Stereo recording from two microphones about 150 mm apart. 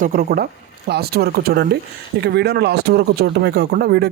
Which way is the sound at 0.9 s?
90° right.